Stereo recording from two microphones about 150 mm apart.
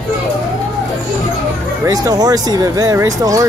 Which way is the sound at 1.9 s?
25° right (ahead or behind).